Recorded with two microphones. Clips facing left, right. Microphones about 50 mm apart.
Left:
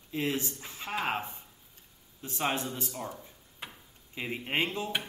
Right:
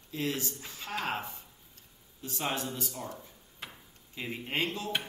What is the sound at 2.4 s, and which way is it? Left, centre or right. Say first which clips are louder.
Speech: left 2 dB; left.